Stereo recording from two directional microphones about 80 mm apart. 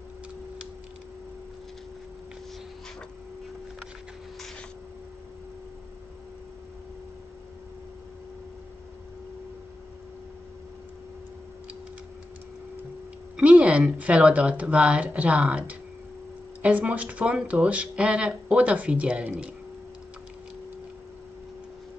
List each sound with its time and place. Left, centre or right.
13.4 s speech: centre